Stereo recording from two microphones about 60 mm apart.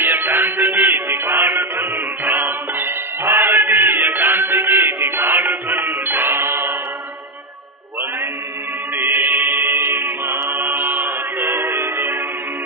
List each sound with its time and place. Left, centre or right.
0.0 s music: right
8.9 s music: right